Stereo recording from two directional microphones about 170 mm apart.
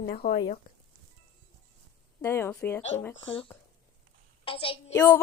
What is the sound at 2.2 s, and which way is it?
Speech, 15° left (ahead or behind).